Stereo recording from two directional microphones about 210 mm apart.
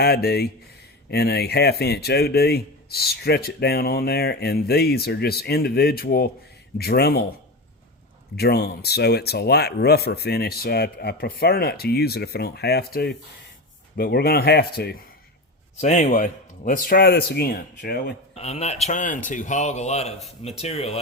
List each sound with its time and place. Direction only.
0.0 s speech: 50° left (ahead or behind)
8.4 s speech: 50° left (ahead or behind)
15.8 s speech: 35° left (ahead or behind)
18.3 s a man's voice: 30° left (ahead or behind)